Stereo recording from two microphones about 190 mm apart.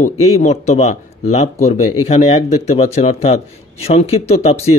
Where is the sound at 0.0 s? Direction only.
35° left (ahead or behind).